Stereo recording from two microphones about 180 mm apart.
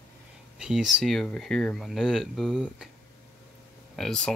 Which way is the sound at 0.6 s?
5° right (ahead or behind).